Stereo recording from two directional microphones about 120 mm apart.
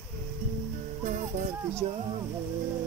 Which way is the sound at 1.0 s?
90° right.